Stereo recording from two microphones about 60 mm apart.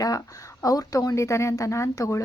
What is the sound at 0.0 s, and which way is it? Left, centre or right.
A woman's voice, left.